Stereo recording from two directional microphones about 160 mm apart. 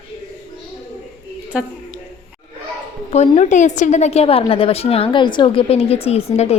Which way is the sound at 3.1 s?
45° left (ahead or behind).